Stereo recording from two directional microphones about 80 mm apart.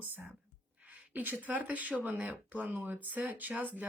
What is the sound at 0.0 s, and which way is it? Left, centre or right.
Speech, right.